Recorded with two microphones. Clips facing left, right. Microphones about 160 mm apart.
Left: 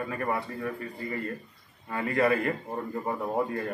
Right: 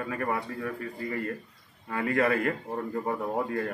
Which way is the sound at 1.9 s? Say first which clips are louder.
Even; 15° left (ahead or behind).